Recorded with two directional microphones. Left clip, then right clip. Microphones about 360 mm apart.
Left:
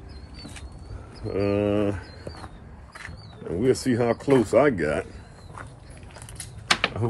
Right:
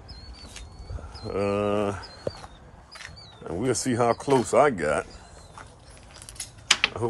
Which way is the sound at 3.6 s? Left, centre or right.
Right.